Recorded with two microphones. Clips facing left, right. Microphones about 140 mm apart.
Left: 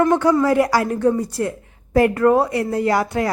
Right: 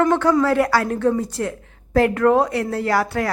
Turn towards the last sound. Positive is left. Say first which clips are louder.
# left 2 dB
turn(degrees=15)  # may be behind; listen again after turning